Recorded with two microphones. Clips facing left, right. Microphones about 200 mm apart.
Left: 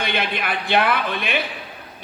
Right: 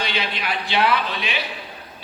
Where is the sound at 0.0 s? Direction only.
55° left (ahead or behind).